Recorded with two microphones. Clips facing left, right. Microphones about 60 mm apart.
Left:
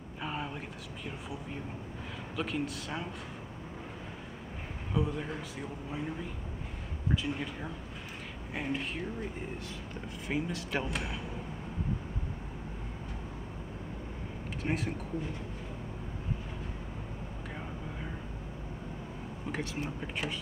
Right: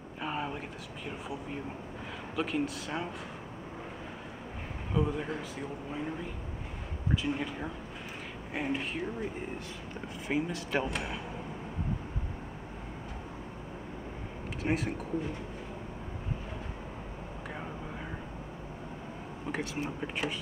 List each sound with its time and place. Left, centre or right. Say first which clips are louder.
0.2 s a sound: right 3 dB; centre
1.0 s speech: right 3 dB; centre
4.9 s speech: right 2 dB; centre
14.6 s speech: right 3 dB; centre
19.4 s speech: right 2 dB; centre